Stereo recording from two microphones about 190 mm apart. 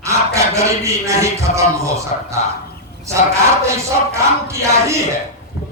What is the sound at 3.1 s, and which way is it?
Music, 15° right (ahead or behind).